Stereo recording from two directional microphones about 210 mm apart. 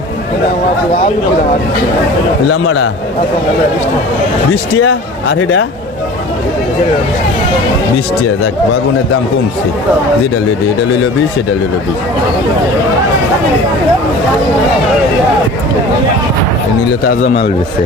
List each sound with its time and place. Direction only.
2.5 s a man's voice: 70° left (ahead or behind)
4.8 s speech: 65° left (ahead or behind)
17.1 s speech: 35° left (ahead or behind)